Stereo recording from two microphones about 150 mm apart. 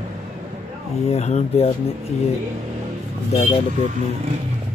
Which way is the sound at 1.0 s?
45° left (ahead or behind).